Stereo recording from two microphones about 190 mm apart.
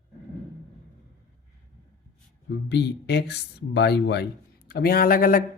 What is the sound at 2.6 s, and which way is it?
Speech, 65° left (ahead or behind).